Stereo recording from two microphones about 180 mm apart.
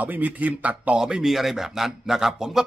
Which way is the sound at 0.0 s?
10° right (ahead or behind).